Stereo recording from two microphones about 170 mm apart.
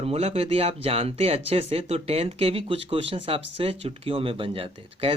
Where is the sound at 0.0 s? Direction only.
35° right (ahead or behind).